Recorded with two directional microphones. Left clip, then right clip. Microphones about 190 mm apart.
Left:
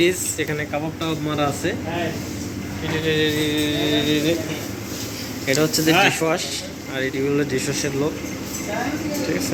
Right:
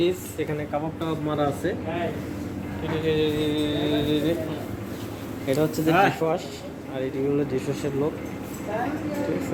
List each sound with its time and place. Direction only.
0.0 s speech: centre (ahead or behind)
3.1 s speech: 5° right (ahead or behind)
5.5 s speech: 5° right (ahead or behind)
5.9 s speech: 60° right (ahead or behind)
6.1 s speech: 5° right (ahead or behind)